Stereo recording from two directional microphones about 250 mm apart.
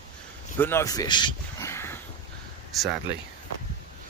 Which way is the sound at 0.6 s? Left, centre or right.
Centre.